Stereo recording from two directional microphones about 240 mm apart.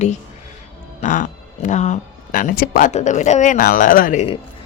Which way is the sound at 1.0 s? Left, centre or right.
Left.